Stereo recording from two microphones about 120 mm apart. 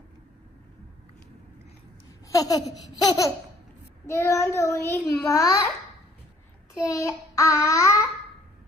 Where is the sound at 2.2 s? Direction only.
30° left (ahead or behind).